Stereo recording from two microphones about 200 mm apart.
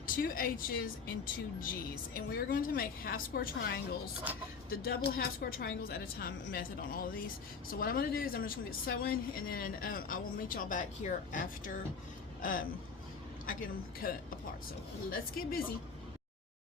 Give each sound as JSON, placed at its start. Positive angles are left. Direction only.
{"t": 0.0, "sound": "speech", "side_deg": 45}
{"t": 2.1, "sound": "speech", "side_deg": 45}